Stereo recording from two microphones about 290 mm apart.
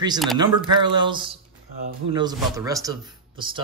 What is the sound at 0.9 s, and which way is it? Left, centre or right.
Speech, centre.